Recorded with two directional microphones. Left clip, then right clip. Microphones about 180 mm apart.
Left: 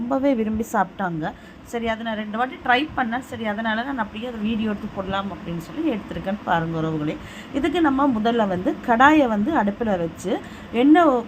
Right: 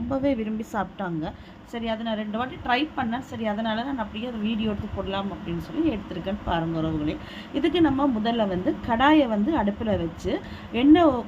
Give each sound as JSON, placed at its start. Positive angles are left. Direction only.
{"t": 0.1, "sound": "speech", "side_deg": 10}